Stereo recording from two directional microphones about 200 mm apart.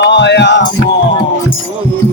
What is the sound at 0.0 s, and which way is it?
Music, 60° left (ahead or behind).